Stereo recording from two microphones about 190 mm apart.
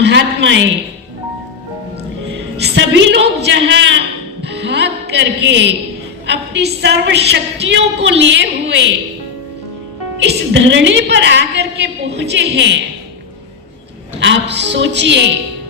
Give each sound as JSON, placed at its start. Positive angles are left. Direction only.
{"t": 0.0, "sound": "a man's voice", "side_deg": -70}
{"t": 2.3, "sound": "a woman's voice", "side_deg": -65}
{"t": 4.4, "sound": "music", "side_deg": -65}
{"t": 6.2, "sound": "a woman's voice", "side_deg": -65}
{"t": 10.2, "sound": "a woman's voice", "side_deg": -70}
{"t": 14.2, "sound": "a woman's voice", "side_deg": -70}